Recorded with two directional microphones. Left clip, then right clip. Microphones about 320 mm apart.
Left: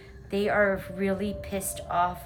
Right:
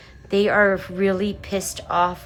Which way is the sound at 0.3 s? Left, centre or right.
Centre.